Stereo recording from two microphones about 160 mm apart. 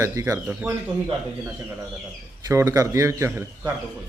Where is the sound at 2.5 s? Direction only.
20° right (ahead or behind).